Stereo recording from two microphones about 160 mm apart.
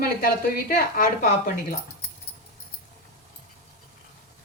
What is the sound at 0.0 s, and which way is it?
A woman's voice, 65° left (ahead or behind).